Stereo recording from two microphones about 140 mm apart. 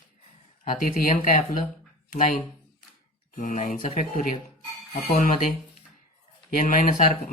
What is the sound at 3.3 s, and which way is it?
Speech, 65° left (ahead or behind).